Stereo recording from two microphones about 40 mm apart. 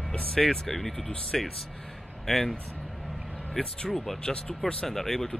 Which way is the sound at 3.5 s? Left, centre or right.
Centre.